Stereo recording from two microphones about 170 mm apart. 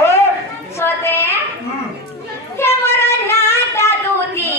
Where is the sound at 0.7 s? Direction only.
15° left (ahead or behind).